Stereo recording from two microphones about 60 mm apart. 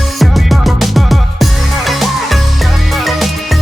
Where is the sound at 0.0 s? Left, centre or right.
Centre.